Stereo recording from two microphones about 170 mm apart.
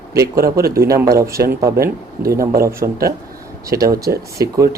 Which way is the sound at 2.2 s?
60° right (ahead or behind).